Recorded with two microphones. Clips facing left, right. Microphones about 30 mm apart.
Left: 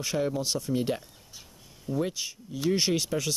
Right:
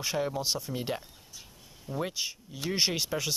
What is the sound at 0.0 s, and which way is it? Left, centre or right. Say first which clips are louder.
Speech: left 2 dB; centre.